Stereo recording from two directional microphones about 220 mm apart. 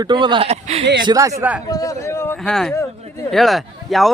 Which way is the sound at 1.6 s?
15° left (ahead or behind).